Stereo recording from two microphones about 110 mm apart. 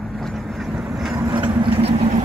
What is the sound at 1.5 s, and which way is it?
Vehicle, 55° right (ahead or behind).